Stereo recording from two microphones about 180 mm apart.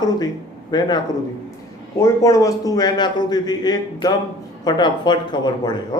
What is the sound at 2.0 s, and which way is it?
A man's voice, 20° left (ahead or behind).